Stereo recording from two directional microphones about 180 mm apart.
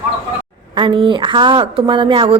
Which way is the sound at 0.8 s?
25° right (ahead or behind).